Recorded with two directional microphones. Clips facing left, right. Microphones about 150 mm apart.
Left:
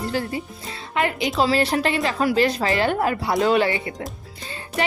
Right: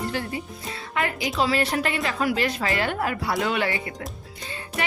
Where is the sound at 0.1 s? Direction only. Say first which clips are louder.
Left 4 dB; 35° left (ahead or behind).